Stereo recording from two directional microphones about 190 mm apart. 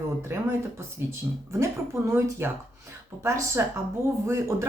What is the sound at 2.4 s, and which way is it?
Speech, 10° right (ahead or behind).